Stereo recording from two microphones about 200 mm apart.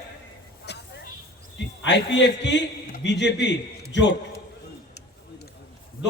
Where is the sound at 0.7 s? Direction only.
55° left (ahead or behind).